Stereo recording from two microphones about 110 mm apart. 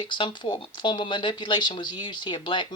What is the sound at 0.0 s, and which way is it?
Speech, 45° left (ahead or behind).